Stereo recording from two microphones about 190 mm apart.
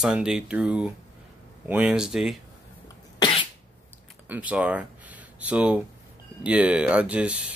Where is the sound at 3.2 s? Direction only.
25° left (ahead or behind).